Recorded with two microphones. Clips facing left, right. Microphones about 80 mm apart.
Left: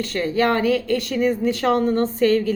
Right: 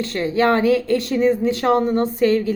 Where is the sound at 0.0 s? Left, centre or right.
Centre.